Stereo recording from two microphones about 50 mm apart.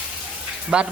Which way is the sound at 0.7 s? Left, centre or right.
Centre.